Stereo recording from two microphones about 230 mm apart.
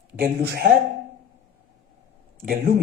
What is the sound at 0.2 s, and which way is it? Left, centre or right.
Speech, right.